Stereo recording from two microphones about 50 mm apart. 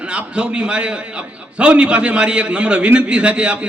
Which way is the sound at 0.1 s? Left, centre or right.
Right.